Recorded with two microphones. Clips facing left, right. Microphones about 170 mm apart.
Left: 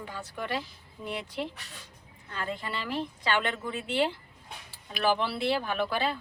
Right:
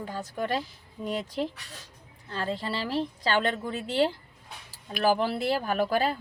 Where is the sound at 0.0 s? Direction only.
40° right (ahead or behind).